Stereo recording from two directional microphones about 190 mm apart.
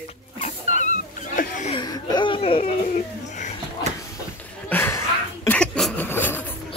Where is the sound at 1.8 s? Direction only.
20° left (ahead or behind).